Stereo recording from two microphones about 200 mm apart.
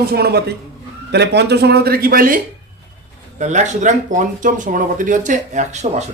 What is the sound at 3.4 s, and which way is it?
Speech, 35° right (ahead or behind).